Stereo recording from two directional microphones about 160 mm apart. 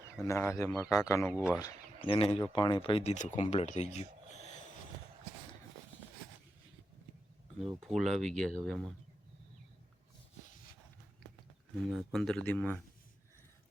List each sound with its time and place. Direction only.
0.2 s a man's voice: 15° left (ahead or behind)
1.3 s speech: 5° right (ahead or behind)
2.0 s speech: 35° left (ahead or behind)
7.8 s speech: centre (ahead or behind)
11.7 s speech: centre (ahead or behind)